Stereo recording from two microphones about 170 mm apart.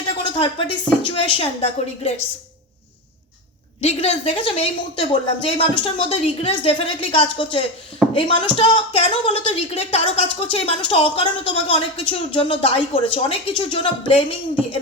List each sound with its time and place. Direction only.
0.1 s a sound: 30° left (ahead or behind)
1.0 s speech: 35° left (ahead or behind)
3.8 s speech: 40° left (ahead or behind)